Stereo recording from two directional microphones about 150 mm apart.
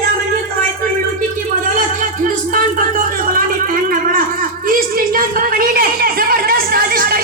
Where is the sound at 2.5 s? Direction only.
70° right (ahead or behind).